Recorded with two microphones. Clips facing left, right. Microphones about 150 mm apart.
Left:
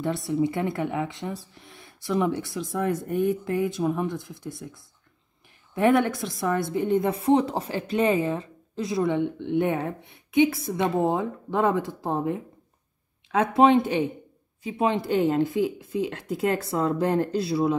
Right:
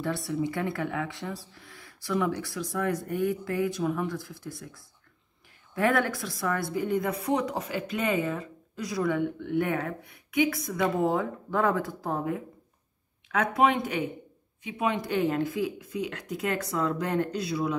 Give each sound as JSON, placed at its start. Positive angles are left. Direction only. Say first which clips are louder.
{"t": 0.0, "sound": "speech", "louder": "left 4 dB", "side_deg": 20}